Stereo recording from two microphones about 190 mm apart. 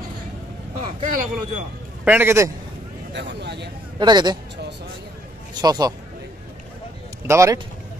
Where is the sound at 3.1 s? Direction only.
65° right (ahead or behind).